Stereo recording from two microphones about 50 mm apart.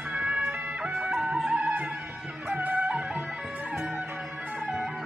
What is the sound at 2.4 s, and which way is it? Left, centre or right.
Music, right.